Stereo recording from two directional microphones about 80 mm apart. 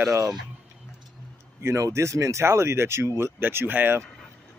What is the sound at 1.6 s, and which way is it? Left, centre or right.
Speech, right.